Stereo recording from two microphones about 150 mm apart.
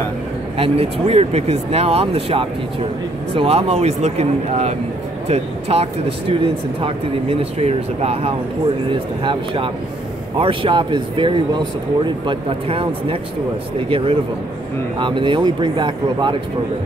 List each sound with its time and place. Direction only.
0.6 s speech: 40° right (ahead or behind)